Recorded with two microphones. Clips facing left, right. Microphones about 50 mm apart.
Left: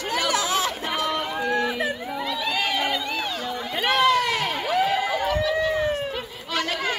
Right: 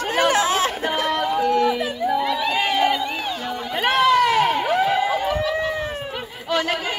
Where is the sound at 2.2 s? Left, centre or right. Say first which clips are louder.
Right 5 dB; right.